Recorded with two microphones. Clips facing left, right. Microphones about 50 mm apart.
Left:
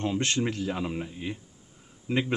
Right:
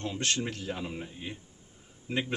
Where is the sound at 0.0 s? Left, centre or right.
Left.